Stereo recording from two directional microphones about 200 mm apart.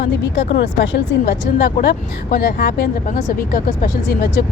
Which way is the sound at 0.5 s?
70° left (ahead or behind).